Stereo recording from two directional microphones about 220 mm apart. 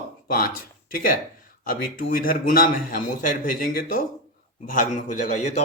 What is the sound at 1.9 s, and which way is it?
Speech, 40° left (ahead or behind).